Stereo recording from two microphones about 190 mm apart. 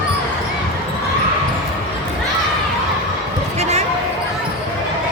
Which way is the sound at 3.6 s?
35° right (ahead or behind).